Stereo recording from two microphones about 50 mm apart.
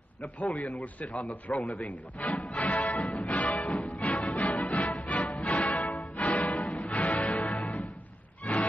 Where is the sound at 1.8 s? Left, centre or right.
Left.